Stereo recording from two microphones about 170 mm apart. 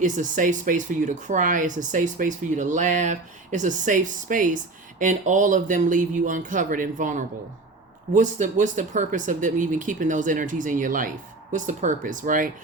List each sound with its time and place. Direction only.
0.0 s speech: 50° right (ahead or behind)